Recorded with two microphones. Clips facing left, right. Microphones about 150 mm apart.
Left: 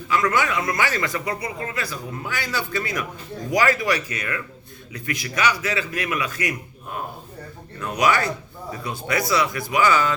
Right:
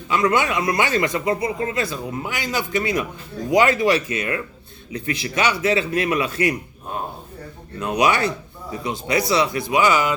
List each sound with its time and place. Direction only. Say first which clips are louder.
0.1 s speech: right 2 dB; 25° right (ahead or behind)